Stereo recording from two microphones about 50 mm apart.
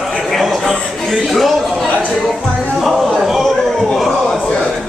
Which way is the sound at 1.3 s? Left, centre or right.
Centre.